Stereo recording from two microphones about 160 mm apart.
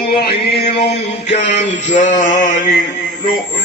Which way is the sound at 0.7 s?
40° left (ahead or behind).